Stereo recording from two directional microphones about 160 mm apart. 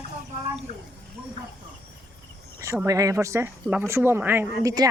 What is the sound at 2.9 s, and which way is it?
Speech, 20° right (ahead or behind).